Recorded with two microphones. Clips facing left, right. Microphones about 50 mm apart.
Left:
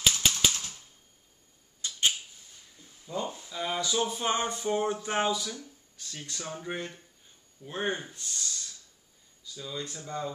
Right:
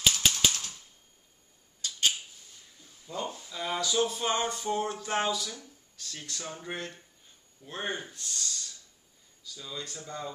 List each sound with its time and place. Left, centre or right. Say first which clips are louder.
0.0 s typewriter: even; centre
1.8 s a sound: left 1 dB; left
3.1 s speech: left 2 dB; centre